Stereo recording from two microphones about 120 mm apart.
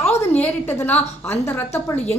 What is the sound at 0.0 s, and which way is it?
A woman's voice, 20° left (ahead or behind).